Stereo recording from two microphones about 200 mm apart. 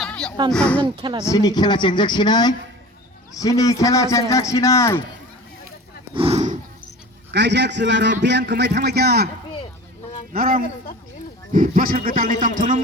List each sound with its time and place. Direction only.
0.0 s a sound: 5° left (ahead or behind)
0.5 s speech: 5° left (ahead or behind)
1.2 s a man's voice: 15° left (ahead or behind)
6.1 s a sound: 30° right (ahead or behind)
7.3 s a man's voice: 60° right (ahead or behind)
10.3 s speech: 45° right (ahead or behind)